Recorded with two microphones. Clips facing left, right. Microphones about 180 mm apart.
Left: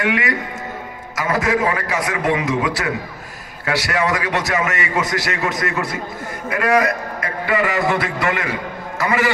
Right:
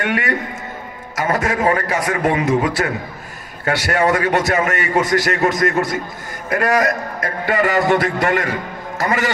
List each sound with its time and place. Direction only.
0.1 s a man's voice: 35° right (ahead or behind)